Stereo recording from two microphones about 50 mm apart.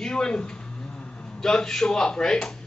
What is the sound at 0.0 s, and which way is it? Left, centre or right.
A man's voice, centre.